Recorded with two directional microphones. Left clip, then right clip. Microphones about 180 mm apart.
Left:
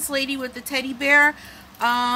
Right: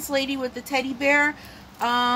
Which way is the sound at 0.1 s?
20° left (ahead or behind).